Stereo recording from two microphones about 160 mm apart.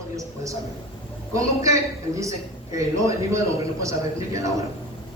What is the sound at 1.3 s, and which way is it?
A man's voice, 20° right (ahead or behind).